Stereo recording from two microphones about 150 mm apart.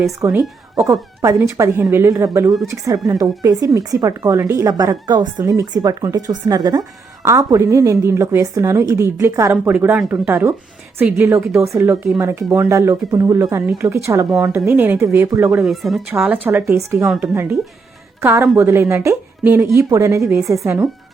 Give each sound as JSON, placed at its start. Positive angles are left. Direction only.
{"t": 0.2, "sound": "a woman's voice", "side_deg": -20}
{"t": 15.6, "sound": "speech", "side_deg": 0}
{"t": 16.1, "sound": "speech", "side_deg": -10}
{"t": 18.2, "sound": "a woman's voice", "side_deg": -15}
{"t": 20.7, "sound": "speech", "side_deg": -10}